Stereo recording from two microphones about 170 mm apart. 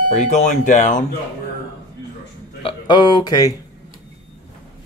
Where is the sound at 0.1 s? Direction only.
45° left (ahead or behind).